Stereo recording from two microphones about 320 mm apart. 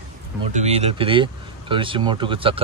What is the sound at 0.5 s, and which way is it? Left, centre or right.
Speech, right.